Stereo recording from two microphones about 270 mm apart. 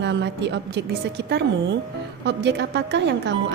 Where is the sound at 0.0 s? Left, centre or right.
Right.